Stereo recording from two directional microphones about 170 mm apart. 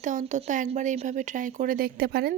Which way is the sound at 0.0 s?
45° right (ahead or behind).